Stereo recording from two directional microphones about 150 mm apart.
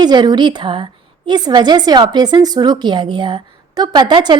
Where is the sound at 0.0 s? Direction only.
30° right (ahead or behind).